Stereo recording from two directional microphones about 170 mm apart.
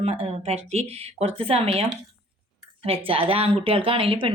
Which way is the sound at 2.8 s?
35° right (ahead or behind).